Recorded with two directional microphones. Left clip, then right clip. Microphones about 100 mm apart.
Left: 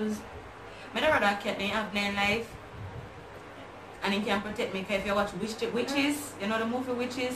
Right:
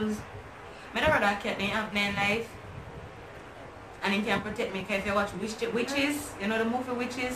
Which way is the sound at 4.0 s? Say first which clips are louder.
Right 1 dB; 20° right (ahead or behind).